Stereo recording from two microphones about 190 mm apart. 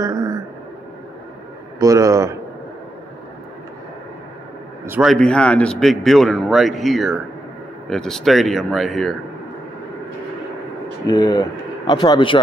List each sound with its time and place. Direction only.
0.0 s a sound: 20° right (ahead or behind)
1.8 s speech: 15° right (ahead or behind)
4.8 s a man's voice: 10° right (ahead or behind)
5.1 s a man's voice: 5° left (ahead or behind)
11.1 s speech: 20° left (ahead or behind)